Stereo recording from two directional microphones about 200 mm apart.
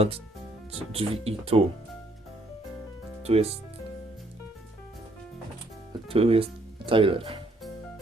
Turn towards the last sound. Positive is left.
turn(degrees=-25)  # may be behind; listen again after turning